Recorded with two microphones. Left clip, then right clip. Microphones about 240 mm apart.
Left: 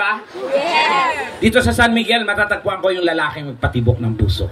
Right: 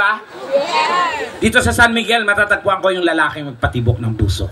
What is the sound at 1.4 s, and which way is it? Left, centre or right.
A man's voice, right.